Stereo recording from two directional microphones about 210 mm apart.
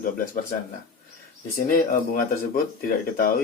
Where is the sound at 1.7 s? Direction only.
40° left (ahead or behind).